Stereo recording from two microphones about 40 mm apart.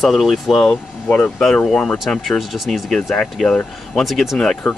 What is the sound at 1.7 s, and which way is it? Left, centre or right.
Speech, centre.